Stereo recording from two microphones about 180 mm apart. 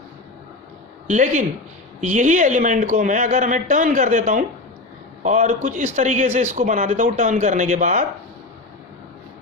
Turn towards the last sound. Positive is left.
turn(degrees=-45)  # may be behind; listen again after turning